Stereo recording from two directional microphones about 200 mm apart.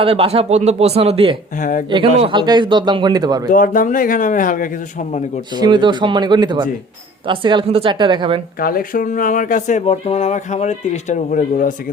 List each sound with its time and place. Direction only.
0.0 s speech: 30° right (ahead or behind)
1.5 s speech: 40° left (ahead or behind)
1.9 s speech: 25° right (ahead or behind)
3.5 s speech: 40° left (ahead or behind)
5.5 s speech: 20° right (ahead or behind)
8.5 s speech: 45° left (ahead or behind)